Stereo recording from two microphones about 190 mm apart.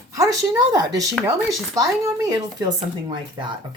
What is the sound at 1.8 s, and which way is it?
Speech, 20° right (ahead or behind).